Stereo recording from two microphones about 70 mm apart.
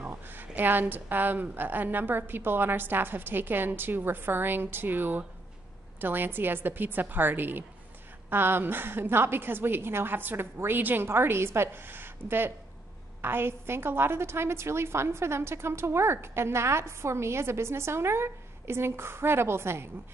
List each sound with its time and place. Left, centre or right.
0.0 s a woman's voice: right